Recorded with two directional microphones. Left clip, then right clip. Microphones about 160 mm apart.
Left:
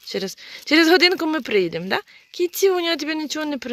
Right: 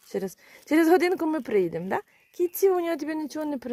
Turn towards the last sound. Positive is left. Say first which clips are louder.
# left 5 dB
turn(degrees=0)  # may be behind; listen again after turning